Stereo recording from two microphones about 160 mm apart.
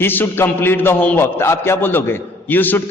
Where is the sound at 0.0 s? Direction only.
15° left (ahead or behind).